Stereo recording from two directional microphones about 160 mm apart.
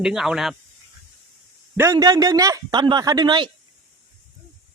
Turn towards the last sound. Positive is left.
turn(degrees=-30)  # may be behind; listen again after turning